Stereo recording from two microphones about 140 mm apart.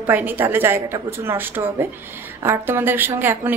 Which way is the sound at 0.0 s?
15° right (ahead or behind).